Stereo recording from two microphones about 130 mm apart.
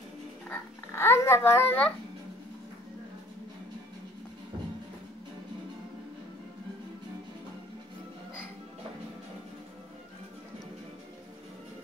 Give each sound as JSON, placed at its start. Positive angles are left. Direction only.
{"t": 0.5, "sound": "a child's voice", "side_deg": 20}